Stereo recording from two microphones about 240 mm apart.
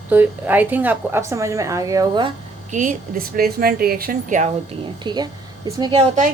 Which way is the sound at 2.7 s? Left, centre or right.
Right.